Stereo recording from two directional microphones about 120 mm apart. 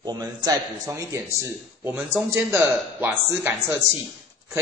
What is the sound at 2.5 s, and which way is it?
A man's voice, 20° right (ahead or behind).